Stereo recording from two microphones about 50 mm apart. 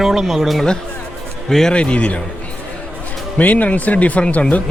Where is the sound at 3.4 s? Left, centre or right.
Left.